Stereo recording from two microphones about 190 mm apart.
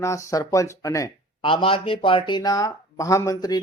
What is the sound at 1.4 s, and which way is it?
Speech, 30° left (ahead or behind).